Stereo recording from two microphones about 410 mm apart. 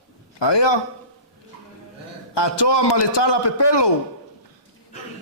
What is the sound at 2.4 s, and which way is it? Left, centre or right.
A man's voice, left.